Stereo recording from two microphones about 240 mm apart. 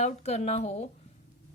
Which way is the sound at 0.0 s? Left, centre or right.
Left.